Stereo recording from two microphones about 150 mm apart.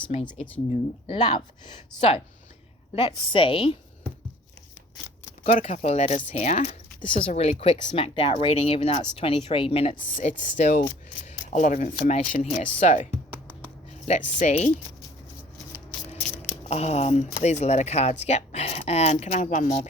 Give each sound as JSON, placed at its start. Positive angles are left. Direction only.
{"t": 0.1, "sound": "speech", "side_deg": 45}
{"t": 1.9, "sound": "speech", "side_deg": 5}
{"t": 2.9, "sound": "speech", "side_deg": 35}
{"t": 5.5, "sound": "speech", "side_deg": 55}
{"t": 7.1, "sound": "speech", "side_deg": 45}
{"t": 10.2, "sound": "speech", "side_deg": 55}
{"t": 13.1, "sound": "music", "side_deg": -15}
{"t": 14.0, "sound": "speech", "side_deg": 55}
{"t": 16.4, "sound": "speech", "side_deg": 45}